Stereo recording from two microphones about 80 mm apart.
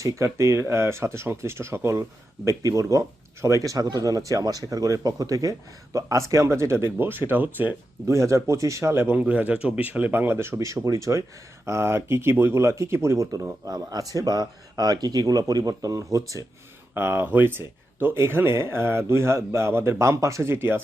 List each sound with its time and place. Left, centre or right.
0.0 s speech: right
8.0 s speech: right
9.1 s speech: centre; by 16.4 s right
16.9 s speech: right